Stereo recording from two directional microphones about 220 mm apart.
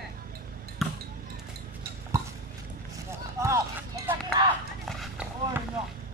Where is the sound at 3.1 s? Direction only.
15° right (ahead or behind).